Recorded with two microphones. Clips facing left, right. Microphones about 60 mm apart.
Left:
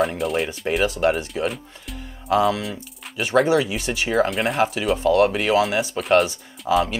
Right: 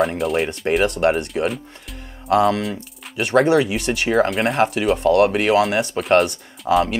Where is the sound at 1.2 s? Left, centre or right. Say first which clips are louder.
Right 3 dB; centre.